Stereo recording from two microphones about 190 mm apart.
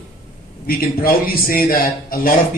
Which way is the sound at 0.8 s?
50° left (ahead or behind).